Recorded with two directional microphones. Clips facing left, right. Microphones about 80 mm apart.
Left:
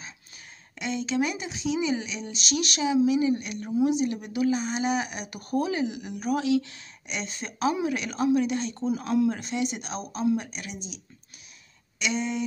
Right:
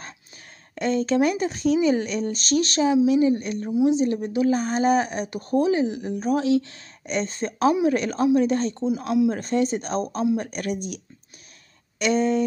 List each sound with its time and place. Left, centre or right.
0.7 s speech: right
4.5 s speech: right
8.8 s speech: centre
9.3 s speech: right
12.0 s speech: right